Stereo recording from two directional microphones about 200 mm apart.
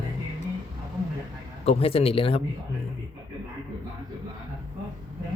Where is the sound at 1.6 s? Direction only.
30° left (ahead or behind).